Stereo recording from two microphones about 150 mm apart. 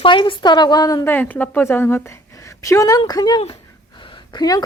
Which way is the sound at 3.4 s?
35° left (ahead or behind).